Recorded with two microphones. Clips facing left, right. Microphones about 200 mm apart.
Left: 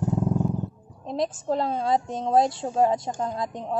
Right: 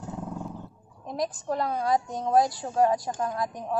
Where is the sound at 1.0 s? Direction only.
25° left (ahead or behind).